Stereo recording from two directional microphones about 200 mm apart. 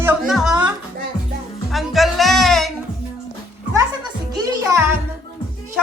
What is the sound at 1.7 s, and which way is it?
Speech, centre (ahead or behind).